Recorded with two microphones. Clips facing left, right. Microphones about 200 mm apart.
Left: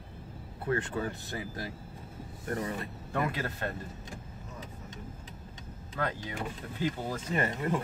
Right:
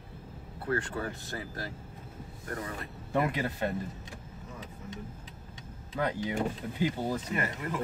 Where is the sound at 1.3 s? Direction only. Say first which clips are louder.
Left 1 dB; 15° left (ahead or behind).